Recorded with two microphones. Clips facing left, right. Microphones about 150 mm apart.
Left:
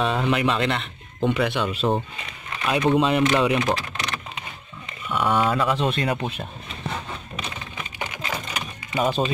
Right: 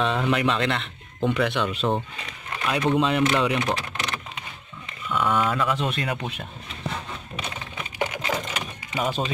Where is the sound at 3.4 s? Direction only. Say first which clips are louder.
Left 3 dB; 30° left (ahead or behind).